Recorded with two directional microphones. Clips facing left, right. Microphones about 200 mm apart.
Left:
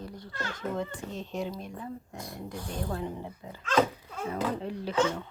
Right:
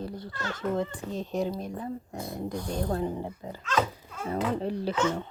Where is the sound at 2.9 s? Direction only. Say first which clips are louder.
Right 5 dB; 40° right (ahead or behind).